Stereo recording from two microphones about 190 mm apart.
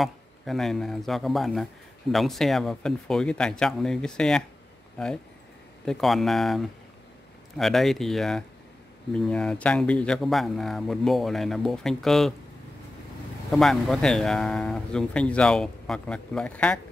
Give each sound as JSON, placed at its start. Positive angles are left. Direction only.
{"t": 0.0, "sound": "speech", "side_deg": 0}
{"t": 13.5, "sound": "speech", "side_deg": 0}